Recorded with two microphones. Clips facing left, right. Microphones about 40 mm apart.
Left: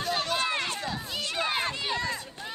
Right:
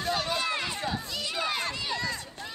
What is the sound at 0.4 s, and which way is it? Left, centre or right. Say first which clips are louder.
Run: left 1 dB; left.